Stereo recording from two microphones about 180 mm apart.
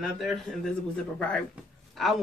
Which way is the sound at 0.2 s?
Centre (ahead or behind).